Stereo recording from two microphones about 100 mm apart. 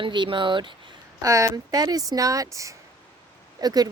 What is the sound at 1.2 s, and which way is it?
Speech, 35° right (ahead or behind).